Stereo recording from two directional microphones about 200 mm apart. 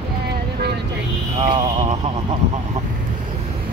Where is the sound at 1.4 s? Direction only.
30° right (ahead or behind).